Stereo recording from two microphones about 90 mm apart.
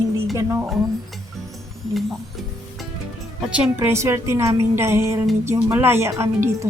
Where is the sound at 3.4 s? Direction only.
15° right (ahead or behind).